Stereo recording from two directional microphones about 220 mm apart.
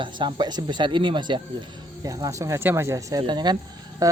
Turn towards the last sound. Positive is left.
turn(degrees=-15)  # may be behind; listen again after turning